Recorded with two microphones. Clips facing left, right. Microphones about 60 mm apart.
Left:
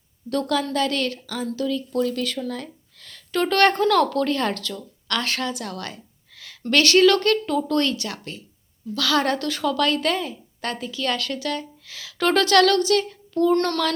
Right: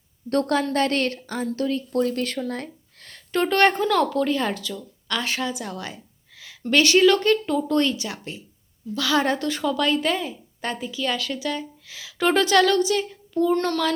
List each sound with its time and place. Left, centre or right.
0.3 s speech: right
3.4 s a woman's voice: centre